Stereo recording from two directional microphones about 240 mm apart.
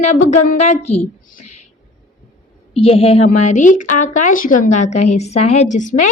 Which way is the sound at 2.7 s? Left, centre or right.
Left.